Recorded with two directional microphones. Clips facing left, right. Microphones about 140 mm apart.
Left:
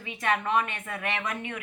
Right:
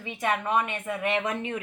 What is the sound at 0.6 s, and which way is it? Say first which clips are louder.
Speech: right 5 dB; 20° right (ahead or behind).